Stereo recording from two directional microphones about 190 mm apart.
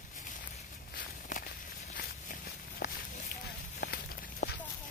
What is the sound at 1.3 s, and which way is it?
Walk, 45° left (ahead or behind).